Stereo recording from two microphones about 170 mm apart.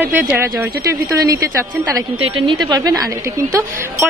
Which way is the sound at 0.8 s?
20° right (ahead or behind).